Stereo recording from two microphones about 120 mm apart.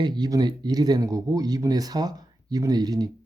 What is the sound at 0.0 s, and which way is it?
Speech, 35° right (ahead or behind).